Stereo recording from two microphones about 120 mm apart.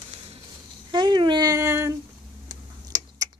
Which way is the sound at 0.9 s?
40° right (ahead or behind).